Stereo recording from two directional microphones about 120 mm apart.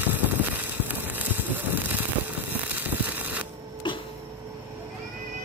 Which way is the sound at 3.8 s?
40° left (ahead or behind).